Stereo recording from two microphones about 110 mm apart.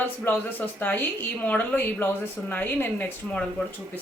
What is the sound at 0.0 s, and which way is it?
A woman's voice, 15° left (ahead or behind).